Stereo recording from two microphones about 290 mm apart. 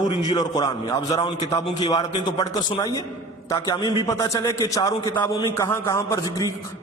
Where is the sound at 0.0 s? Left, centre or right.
Centre.